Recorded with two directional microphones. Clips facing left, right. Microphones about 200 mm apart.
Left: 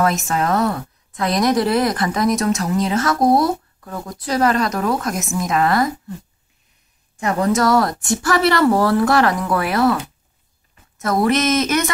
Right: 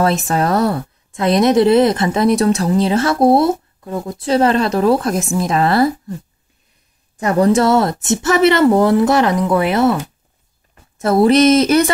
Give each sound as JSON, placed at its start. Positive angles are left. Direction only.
{"t": 0.0, "sound": "a woman's voice", "side_deg": -35}
{"t": 7.2, "sound": "a woman's voice", "side_deg": -35}